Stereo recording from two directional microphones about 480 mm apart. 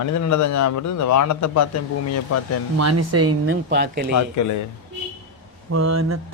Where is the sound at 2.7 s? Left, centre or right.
Right.